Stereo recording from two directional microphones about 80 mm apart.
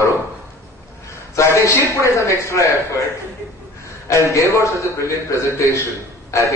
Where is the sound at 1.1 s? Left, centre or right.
Left.